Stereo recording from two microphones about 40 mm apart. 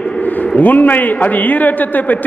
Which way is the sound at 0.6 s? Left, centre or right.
Left.